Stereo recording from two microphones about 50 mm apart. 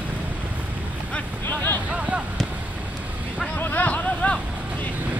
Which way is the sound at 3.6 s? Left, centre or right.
Left.